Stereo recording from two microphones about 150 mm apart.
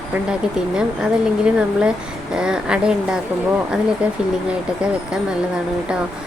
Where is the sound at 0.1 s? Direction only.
5° right (ahead or behind).